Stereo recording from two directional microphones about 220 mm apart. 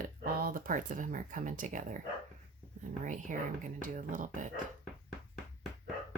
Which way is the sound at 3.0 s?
35° right (ahead or behind).